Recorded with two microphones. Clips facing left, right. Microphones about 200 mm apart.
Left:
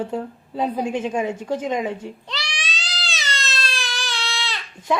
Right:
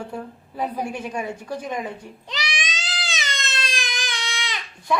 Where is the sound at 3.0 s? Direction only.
20° right (ahead or behind).